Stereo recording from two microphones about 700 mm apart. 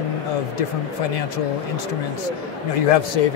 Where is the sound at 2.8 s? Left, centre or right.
Left.